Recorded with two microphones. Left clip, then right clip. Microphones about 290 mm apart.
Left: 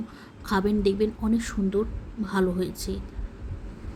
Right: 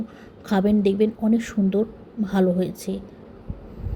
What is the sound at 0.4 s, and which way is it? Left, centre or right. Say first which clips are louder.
A woman's voice: right 3 dB; centre.